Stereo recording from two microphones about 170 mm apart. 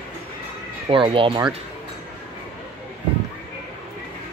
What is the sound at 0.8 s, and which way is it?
Speech, 30° right (ahead or behind).